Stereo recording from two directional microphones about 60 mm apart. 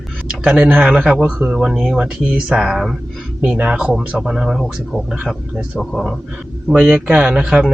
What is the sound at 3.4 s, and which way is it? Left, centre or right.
Speech, right.